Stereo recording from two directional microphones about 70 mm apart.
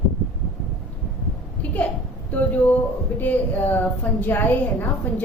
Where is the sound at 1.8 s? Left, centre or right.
Centre.